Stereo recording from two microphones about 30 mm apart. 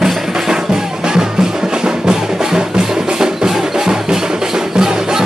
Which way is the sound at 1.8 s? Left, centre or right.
Right.